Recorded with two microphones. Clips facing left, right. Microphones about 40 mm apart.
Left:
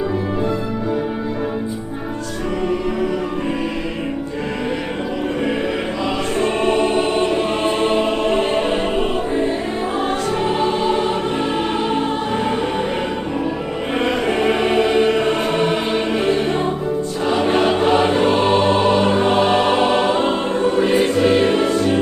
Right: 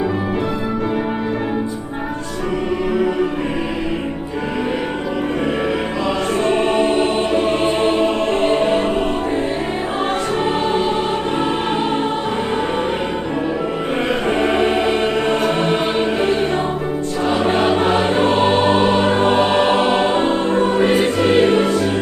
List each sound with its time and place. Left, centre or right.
6.5 s music: centre
10.8 s music: centre
14.1 s music: centre
17.2 s choir: centre
18.2 s music: centre
19.1 s music: right
19.4 s choir: centre
20.5 s music: right
21.2 s music: centre